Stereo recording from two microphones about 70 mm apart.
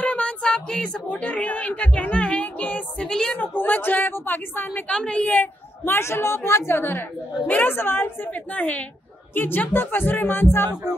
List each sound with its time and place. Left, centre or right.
0.0 s a sound: left
3.3 s speech: left
4.8 s speech: centre
5.9 s a woman's voice: left